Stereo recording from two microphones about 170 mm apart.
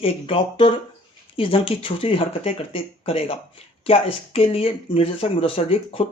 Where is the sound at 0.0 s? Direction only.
30° left (ahead or behind).